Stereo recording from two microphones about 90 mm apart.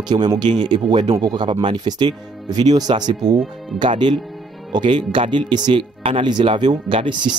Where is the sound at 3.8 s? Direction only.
60° right (ahead or behind).